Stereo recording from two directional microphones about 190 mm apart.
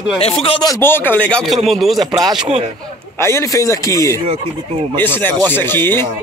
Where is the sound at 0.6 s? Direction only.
15° left (ahead or behind).